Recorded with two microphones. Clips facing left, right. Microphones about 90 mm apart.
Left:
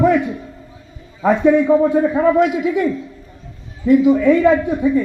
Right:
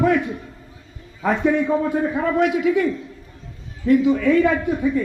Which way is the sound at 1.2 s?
20° left (ahead or behind).